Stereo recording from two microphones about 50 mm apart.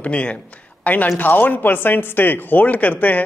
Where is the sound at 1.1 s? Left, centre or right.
Left.